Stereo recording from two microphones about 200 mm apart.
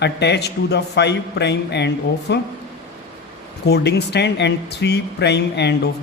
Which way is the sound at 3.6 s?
55° left (ahead or behind).